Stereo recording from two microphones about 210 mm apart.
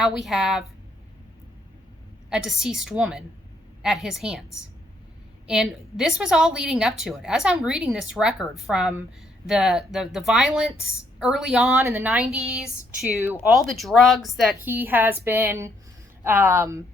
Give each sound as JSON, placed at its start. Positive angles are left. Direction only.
{"t": 0.0, "sound": "a woman's voice", "side_deg": 0}
{"t": 2.3, "sound": "a woman's voice", "side_deg": 0}
{"t": 5.5, "sound": "a woman's voice", "side_deg": 0}
{"t": 13.5, "sound": "a woman's voice", "side_deg": 0}